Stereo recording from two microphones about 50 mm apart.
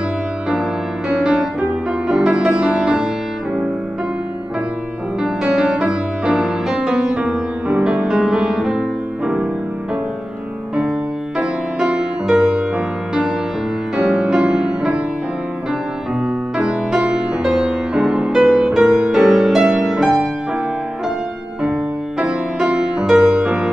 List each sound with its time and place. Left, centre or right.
0.5 s music: centre
5.2 s music: centre
11.3 s music: centre
16.9 s music: centre
22.2 s music: centre